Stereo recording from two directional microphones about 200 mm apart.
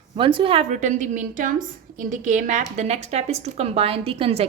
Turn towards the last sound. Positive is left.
turn(degrees=-30)  # may be behind; listen again after turning